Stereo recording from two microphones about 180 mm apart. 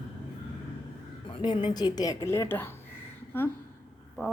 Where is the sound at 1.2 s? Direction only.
25° left (ahead or behind).